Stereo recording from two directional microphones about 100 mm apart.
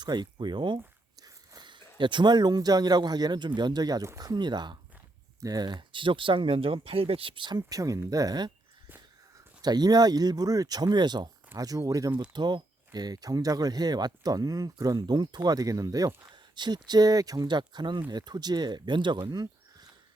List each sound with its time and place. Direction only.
0.0 s speech: 45° right (ahead or behind)
7.7 s speech: 35° right (ahead or behind)
9.6 s speech: 45° right (ahead or behind)
12.3 s speech: 50° right (ahead or behind)
19.3 s a sound: 40° right (ahead or behind)